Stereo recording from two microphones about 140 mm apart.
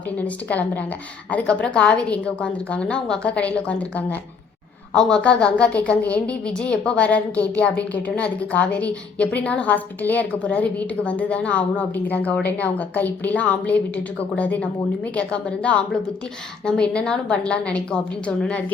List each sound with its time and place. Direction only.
0.2 s a woman's voice: 10° left (ahead or behind)